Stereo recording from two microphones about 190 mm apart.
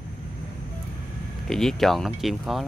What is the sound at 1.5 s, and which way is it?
Speech, centre (ahead or behind).